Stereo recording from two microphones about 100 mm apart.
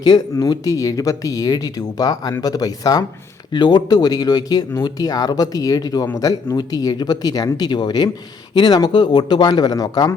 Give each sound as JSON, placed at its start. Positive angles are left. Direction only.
{"t": 0.0, "sound": "speech", "side_deg": 40}